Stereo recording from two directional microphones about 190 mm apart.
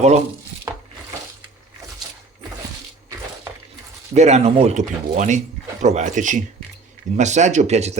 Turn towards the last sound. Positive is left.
turn(degrees=-35)  # may be behind; listen again after turning